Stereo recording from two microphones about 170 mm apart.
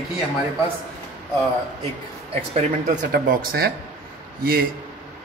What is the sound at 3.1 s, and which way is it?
Speech, 55° right (ahead or behind).